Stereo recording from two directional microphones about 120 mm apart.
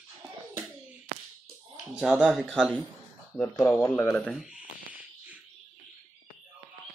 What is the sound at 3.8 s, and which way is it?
Speech, 25° left (ahead or behind).